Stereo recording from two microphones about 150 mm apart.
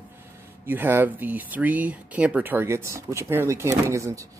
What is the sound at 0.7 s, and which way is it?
A man's voice, 15° right (ahead or behind).